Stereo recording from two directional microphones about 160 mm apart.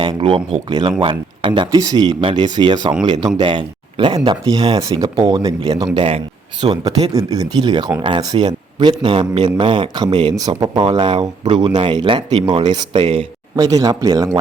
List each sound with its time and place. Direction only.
0.0 s speech: 30° right (ahead or behind)
13.6 s speech: 20° right (ahead or behind)